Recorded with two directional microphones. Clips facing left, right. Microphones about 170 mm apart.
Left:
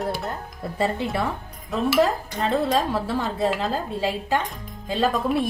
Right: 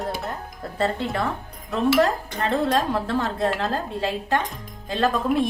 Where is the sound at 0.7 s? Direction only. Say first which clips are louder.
Even; 10° left (ahead or behind).